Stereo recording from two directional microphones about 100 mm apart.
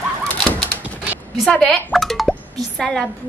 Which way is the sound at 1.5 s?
5° left (ahead or behind).